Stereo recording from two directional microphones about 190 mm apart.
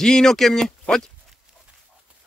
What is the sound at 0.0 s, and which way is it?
Speech, 5° left (ahead or behind).